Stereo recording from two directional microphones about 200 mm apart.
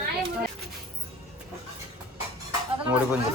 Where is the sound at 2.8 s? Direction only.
5° right (ahead or behind).